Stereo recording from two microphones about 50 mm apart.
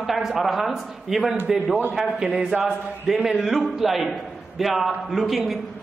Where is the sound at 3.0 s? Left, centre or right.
Centre.